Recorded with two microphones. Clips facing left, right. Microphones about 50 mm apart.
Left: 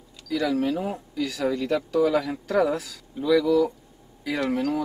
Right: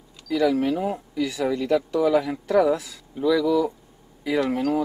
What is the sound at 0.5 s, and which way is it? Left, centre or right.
Speech, right.